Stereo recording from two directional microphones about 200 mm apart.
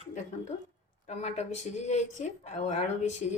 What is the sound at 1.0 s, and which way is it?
A woman's voice, 35° left (ahead or behind).